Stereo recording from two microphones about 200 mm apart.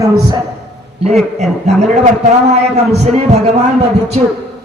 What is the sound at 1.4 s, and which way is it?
A man's voice, 35° right (ahead or behind).